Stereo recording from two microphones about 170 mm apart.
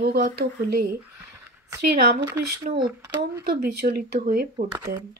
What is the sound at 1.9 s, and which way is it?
Speech, 70° right (ahead or behind).